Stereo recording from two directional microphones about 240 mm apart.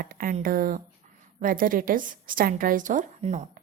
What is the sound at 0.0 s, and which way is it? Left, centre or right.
A woman's voice, right.